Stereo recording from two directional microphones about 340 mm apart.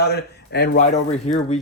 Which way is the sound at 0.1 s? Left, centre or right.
Left.